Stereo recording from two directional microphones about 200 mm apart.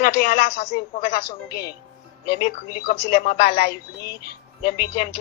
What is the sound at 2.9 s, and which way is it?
Speech, 40° left (ahead or behind).